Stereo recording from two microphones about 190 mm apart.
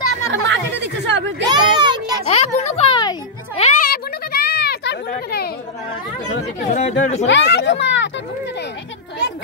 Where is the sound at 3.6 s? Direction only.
40° left (ahead or behind).